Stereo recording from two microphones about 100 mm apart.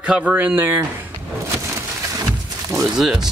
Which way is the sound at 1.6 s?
25° right (ahead or behind).